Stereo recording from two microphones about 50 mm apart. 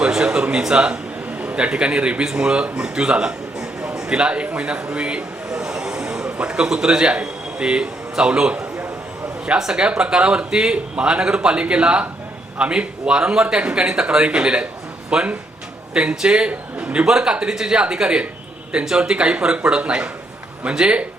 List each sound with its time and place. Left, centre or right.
0.1 s a man's voice: centre
2.8 s a sound: centre
6.5 s speech: centre
17.1 s speech: centre